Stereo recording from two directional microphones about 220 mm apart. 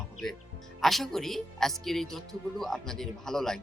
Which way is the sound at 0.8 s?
Centre (ahead or behind).